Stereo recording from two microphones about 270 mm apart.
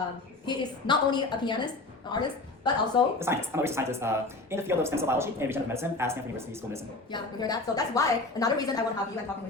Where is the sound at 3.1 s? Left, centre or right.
Centre.